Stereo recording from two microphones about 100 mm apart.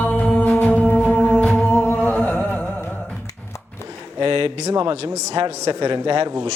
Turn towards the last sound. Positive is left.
turn(degrees=-60)  # may be behind; listen again after turning